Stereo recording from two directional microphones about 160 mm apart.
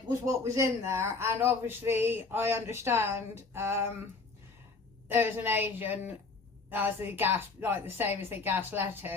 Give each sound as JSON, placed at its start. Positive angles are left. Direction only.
{"t": 0.1, "sound": "a man's voice", "side_deg": -20}
{"t": 5.0, "sound": "a man's voice", "side_deg": -15}